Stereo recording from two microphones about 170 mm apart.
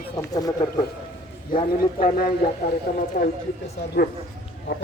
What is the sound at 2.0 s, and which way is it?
A man's voice, 55° left (ahead or behind).